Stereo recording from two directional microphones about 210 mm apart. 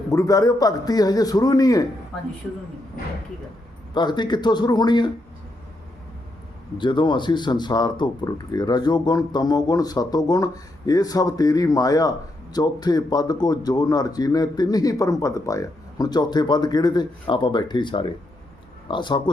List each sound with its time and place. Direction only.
0.1 s a man's voice: 15° left (ahead or behind)
3.9 s speech: 20° left (ahead or behind)
6.7 s speech: 20° left (ahead or behind)